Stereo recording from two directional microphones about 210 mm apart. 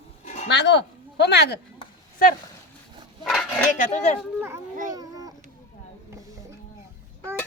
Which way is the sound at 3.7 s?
35° left (ahead or behind).